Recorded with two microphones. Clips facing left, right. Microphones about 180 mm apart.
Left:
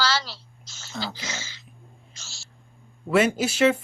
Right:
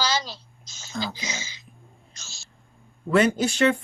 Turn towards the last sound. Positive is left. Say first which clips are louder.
# even
turn(degrees=5)  # may be behind; listen again after turning